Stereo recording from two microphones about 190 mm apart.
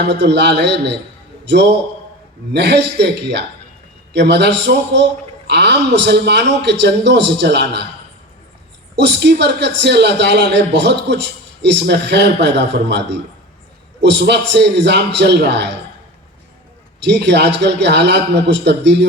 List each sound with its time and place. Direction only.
0.0 s speech: 65° right (ahead or behind)
9.0 s speech: 65° right (ahead or behind)
17.0 s speech: 65° right (ahead or behind)